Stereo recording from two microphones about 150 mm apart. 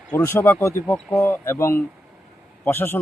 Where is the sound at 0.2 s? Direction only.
15° left (ahead or behind).